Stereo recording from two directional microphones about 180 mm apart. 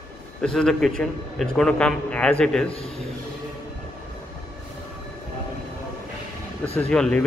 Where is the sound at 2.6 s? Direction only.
30° left (ahead or behind).